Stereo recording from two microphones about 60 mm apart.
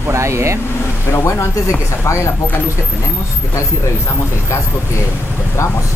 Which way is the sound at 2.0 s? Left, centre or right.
Left.